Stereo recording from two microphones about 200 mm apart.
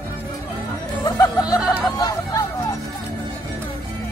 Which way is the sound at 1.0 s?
20° left (ahead or behind).